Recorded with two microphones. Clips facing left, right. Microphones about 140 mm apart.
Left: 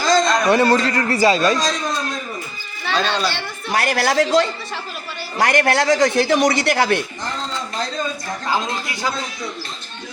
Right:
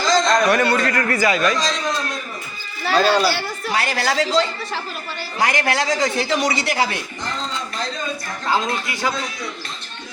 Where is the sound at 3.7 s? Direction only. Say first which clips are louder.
Left 3 dB; 55° left (ahead or behind).